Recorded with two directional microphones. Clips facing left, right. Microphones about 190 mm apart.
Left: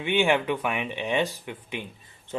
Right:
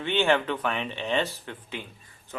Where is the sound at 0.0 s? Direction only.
15° left (ahead or behind).